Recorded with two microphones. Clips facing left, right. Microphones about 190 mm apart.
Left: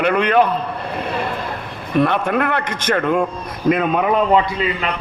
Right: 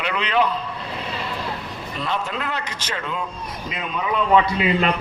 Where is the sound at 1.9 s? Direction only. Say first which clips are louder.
Left 11 dB; 55° left (ahead or behind).